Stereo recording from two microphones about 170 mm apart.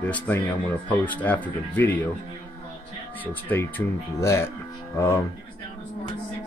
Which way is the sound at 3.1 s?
10° left (ahead or behind).